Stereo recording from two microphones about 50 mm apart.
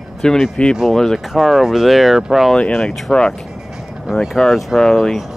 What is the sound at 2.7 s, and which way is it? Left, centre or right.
Speech, centre.